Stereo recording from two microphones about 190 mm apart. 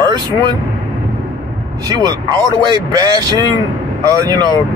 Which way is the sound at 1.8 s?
20° right (ahead or behind).